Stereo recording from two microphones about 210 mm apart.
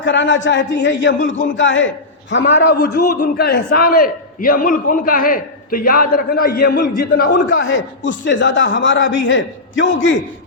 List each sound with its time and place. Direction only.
0.0 s speech: 60° left (ahead or behind)
1.2 s a man's voice: 35° left (ahead or behind)
1.5 s a man's voice: 65° left (ahead or behind); by 7.3 s 45° left (ahead or behind)
7.3 s speech: 60° left (ahead or behind)